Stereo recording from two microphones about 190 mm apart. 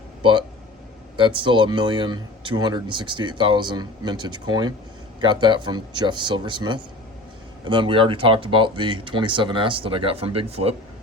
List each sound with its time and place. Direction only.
1.1 s speech: 25° right (ahead or behind)